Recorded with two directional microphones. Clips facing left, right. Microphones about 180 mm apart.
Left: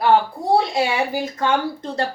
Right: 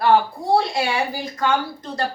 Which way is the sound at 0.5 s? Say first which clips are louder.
Left 1 dB; 20° left (ahead or behind).